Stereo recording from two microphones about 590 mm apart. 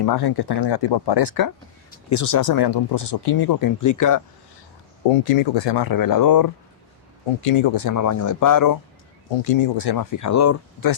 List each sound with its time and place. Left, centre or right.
0.0 s speech: left
5.0 s speech: left
7.4 s speech: left
9.4 s speech: left
9.7 s speech: left